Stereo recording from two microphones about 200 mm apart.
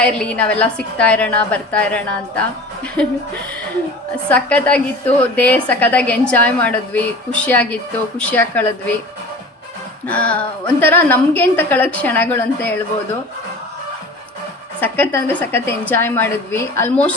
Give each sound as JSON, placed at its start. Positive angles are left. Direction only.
{"t": 0.0, "sound": "a woman's voice", "side_deg": 5}
{"t": 4.3, "sound": "a woman's voice", "side_deg": 5}
{"t": 10.1, "sound": "a woman's voice", "side_deg": 5}
{"t": 14.8, "sound": "a woman's voice", "side_deg": 10}